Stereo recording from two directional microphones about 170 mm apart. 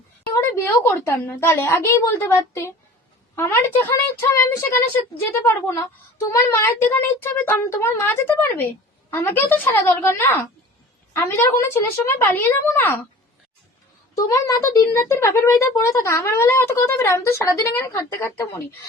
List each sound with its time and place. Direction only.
0.3 s speech: 15° left (ahead or behind)
14.2 s speech: 20° left (ahead or behind)